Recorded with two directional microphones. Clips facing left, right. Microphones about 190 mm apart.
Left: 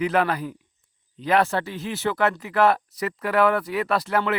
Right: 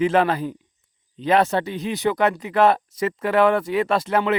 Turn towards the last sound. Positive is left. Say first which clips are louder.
# right 3 dB
turn(degrees=-20)  # may be behind; listen again after turning